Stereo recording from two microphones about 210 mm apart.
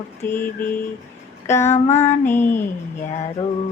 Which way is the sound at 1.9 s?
10° left (ahead or behind).